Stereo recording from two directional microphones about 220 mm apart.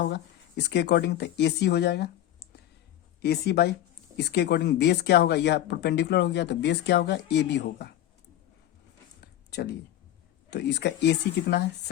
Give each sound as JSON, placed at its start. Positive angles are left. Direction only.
{"t": 0.0, "sound": "speech", "side_deg": 50}
{"t": 3.2, "sound": "speech", "side_deg": 45}
{"t": 9.2, "sound": "a sound", "side_deg": 50}
{"t": 10.5, "sound": "speech", "side_deg": 50}